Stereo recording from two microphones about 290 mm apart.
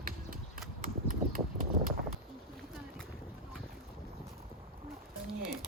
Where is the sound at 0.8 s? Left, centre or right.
Right.